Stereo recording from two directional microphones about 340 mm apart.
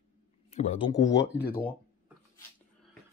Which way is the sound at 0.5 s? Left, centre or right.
Centre.